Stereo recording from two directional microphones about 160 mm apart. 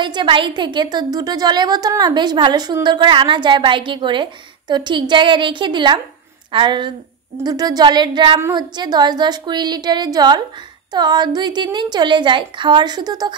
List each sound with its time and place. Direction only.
0.0 s a woman's voice: 30° right (ahead or behind)
8.4 s a woman's voice: 15° right (ahead or behind)